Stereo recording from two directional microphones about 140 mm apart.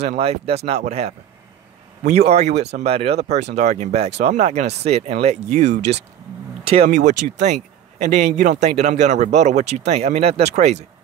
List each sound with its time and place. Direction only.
0.0 s speech: 50° right (ahead or behind)